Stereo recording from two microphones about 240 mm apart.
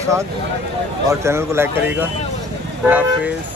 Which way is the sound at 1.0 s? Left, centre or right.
Centre.